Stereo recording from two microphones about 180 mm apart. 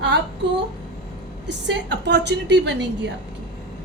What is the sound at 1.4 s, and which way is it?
A woman's voice, 80° right.